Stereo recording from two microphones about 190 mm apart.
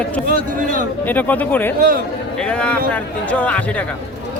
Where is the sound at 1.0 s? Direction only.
10° left (ahead or behind).